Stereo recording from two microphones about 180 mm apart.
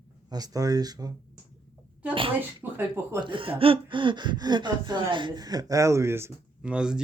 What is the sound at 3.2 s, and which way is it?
Speech, 30° right (ahead or behind).